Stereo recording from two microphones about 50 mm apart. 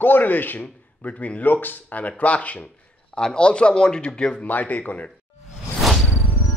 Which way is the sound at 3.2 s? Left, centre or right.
Centre.